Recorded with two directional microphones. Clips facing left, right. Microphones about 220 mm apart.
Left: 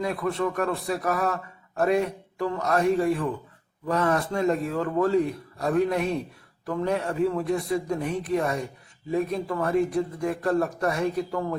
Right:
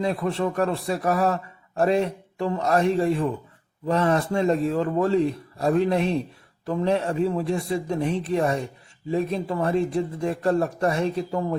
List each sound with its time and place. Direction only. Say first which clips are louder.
0.0 s a man's voice: right 2 dB; 30° right (ahead or behind)